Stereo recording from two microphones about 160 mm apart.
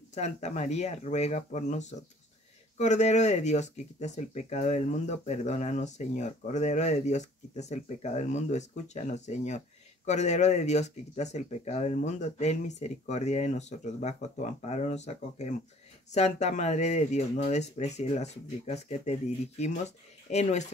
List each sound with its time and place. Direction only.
0.1 s speech: 45° left (ahead or behind)